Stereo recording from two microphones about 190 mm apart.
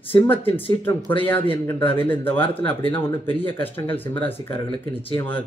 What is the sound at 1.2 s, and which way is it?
Speech, 10° left (ahead or behind).